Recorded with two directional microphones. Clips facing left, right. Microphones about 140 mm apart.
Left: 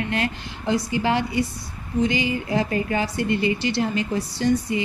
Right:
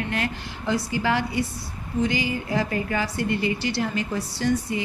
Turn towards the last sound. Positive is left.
turn(degrees=20)  # may be behind; listen again after turning